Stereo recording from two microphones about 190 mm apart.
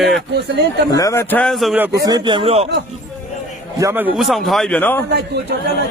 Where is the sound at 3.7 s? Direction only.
15° right (ahead or behind); by 5.0 s 10° left (ahead or behind).